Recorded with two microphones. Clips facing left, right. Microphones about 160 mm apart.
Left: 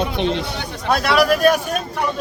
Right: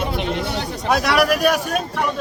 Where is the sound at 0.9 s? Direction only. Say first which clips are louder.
Left 1 dB; 10° right (ahead or behind).